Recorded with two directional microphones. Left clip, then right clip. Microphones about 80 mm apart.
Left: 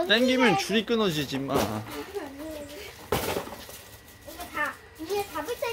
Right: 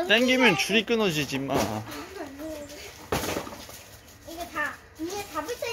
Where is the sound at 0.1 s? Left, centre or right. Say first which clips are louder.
Right 2 dB; centre.